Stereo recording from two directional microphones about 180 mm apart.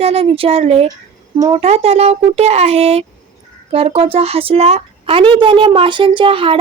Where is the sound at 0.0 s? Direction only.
35° right (ahead or behind).